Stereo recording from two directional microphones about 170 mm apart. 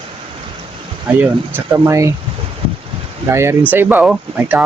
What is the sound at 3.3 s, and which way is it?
Speech, 15° right (ahead or behind).